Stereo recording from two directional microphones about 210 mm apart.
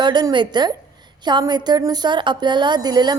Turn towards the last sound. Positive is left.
turn(degrees=-20)  # may be behind; listen again after turning